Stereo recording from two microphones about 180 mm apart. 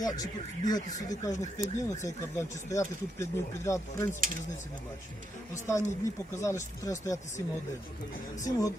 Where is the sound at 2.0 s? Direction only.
15° left (ahead or behind).